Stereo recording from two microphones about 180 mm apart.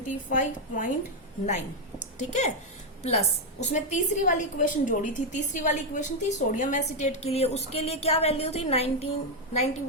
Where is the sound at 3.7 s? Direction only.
45° left (ahead or behind).